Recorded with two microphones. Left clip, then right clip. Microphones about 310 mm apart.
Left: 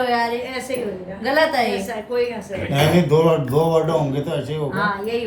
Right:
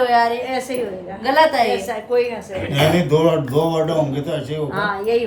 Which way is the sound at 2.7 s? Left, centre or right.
Centre.